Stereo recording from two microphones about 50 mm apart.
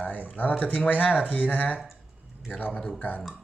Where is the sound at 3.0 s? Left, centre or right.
Left.